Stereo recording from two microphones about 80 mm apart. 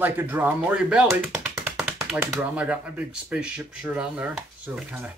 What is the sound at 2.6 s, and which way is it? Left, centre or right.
Speech, centre.